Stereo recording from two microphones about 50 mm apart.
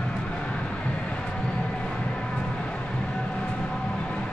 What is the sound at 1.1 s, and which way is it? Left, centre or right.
Vehicle, centre.